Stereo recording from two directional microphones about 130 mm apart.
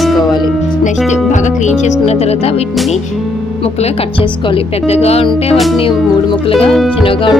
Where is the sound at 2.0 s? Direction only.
55° left (ahead or behind).